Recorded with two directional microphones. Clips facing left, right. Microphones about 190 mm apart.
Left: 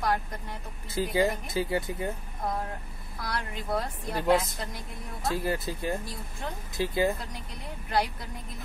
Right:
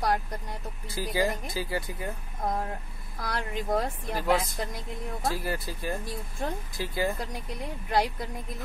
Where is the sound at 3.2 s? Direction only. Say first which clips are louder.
Right 3 dB; 45° right (ahead or behind).